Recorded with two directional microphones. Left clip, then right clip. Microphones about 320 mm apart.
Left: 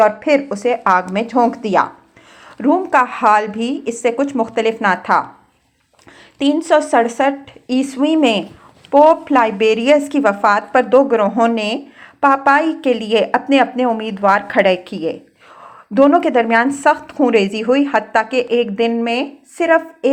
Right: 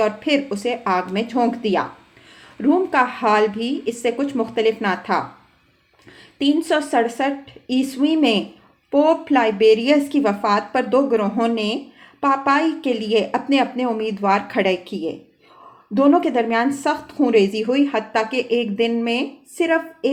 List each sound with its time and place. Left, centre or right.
0.0 s a woman's voice: centre
6.7 s a woman's voice: centre